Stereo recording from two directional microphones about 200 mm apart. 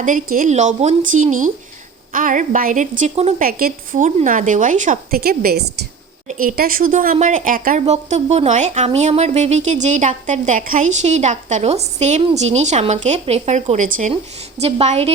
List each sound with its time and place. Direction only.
0.0 s a woman's voice: 40° right (ahead or behind)